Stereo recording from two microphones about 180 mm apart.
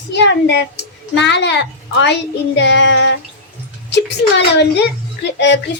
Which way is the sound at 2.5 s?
85° left.